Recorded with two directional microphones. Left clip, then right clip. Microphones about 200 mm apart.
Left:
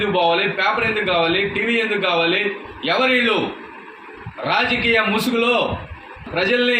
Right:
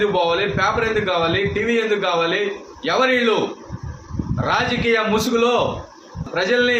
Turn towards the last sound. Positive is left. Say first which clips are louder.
# even
turn(degrees=-15)  # may be behind; listen again after turning